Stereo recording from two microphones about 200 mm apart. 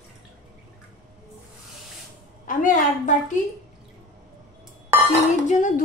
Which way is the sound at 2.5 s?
40° left (ahead or behind).